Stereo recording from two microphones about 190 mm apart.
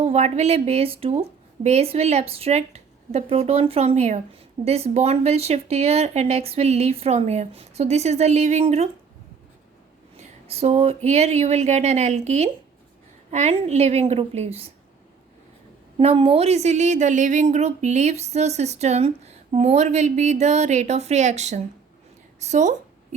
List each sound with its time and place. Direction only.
0.0 s a woman's voice: 35° right (ahead or behind)
10.2 s a woman's voice: 35° right (ahead or behind)
16.0 s a woman's voice: 30° right (ahead or behind)